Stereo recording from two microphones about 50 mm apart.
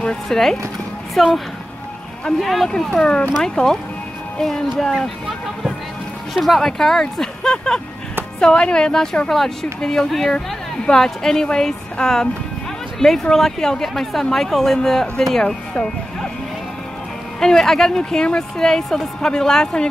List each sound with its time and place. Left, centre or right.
0.0 s a woman's voice: centre
6.3 s a woman's voice: centre
17.4 s a woman's voice: centre